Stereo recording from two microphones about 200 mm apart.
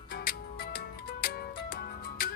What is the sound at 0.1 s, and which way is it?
Music, 50° left (ahead or behind).